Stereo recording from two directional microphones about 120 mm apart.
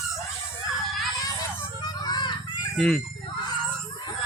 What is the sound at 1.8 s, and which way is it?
Child singing, 35° left (ahead or behind).